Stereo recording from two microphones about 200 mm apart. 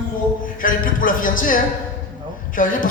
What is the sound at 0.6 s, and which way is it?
A woman's voice, 45° left (ahead or behind).